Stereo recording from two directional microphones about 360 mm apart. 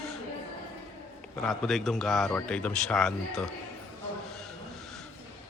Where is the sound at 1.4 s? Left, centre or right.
Centre.